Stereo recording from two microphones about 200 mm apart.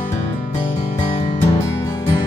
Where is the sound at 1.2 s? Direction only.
20° left (ahead or behind).